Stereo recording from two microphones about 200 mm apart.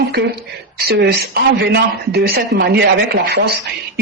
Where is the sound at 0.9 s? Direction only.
55° right (ahead or behind).